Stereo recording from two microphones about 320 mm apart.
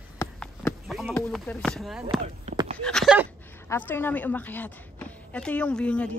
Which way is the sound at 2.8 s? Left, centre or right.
Centre.